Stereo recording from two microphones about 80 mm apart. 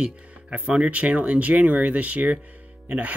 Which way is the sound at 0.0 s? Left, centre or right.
Centre.